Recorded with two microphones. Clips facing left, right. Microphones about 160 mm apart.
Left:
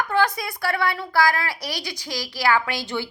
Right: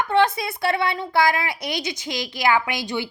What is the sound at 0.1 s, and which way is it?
A woman's voice, 25° right (ahead or behind).